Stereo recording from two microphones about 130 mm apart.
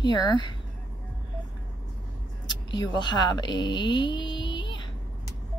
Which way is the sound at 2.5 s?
35° left (ahead or behind).